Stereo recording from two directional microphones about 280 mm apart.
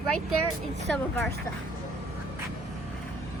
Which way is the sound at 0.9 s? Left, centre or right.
Centre.